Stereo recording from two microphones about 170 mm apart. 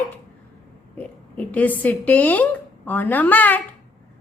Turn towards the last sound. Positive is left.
turn(degrees=10)  # may be behind; listen again after turning